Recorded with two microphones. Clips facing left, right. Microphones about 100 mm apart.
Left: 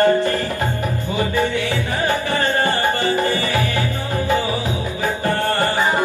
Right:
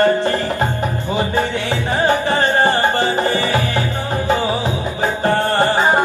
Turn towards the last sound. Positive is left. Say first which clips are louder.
# right 4 dB
turn(degrees=-25)  # may be behind; listen again after turning